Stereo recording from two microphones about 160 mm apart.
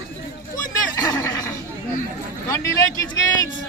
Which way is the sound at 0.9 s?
20° left (ahead or behind).